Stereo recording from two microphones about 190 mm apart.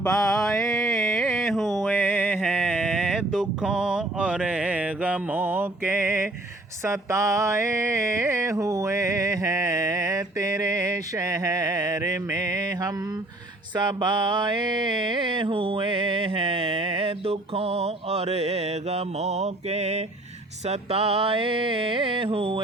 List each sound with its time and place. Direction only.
0.0 s mantra: 5° left (ahead or behind)
0.9 s a sound: centre (ahead or behind)
2.0 s music: 10° left (ahead or behind)
2.5 s mantra: centre (ahead or behind)
6.8 s music: 15° right (ahead or behind)
13.7 s mantra: 25° right (ahead or behind)